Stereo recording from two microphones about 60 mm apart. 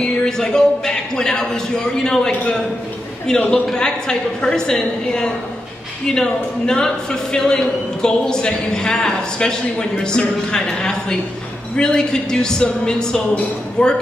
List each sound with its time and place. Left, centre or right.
0.0 s speech: centre
3.3 s a man's voice: centre